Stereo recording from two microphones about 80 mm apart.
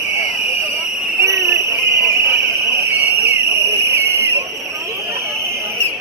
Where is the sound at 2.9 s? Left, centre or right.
Right.